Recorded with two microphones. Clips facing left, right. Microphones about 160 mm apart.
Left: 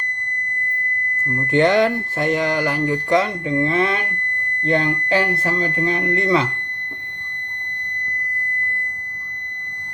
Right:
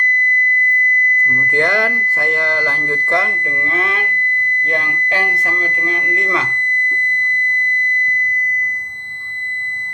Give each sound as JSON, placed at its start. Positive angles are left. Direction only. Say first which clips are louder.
{"t": 1.2, "sound": "speech", "louder": "left 3 dB", "side_deg": 10}
{"t": 1.5, "sound": "speech", "louder": "left 4 dB", "side_deg": 20}